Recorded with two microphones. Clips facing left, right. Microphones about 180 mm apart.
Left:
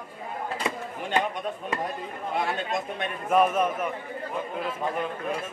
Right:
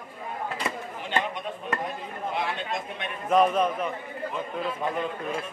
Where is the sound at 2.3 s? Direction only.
45° left (ahead or behind).